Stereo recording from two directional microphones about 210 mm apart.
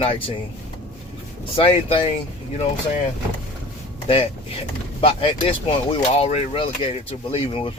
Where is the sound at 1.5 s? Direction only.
25° left (ahead or behind).